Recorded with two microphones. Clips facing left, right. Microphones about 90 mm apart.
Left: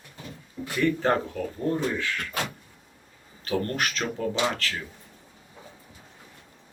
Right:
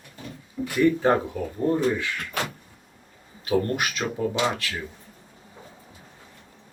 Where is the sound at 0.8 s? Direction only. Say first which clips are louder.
Right 4 dB; 15° right (ahead or behind).